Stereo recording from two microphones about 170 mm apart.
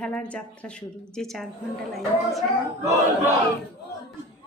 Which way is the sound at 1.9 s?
Centre (ahead or behind).